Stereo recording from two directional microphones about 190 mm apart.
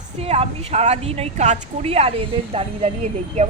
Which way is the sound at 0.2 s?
35° right (ahead or behind).